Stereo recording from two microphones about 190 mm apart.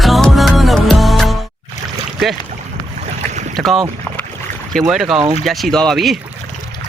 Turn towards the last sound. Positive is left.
turn(degrees=0)  # may be behind; listen again after turning